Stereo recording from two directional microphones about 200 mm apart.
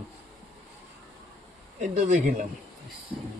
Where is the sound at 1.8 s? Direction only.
35° right (ahead or behind).